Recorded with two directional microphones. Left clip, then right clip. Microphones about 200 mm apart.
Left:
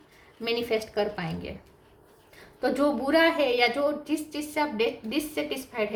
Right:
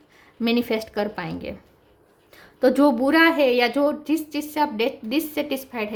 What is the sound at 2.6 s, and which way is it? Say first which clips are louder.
Speech: right 7 dB; 55° right (ahead or behind).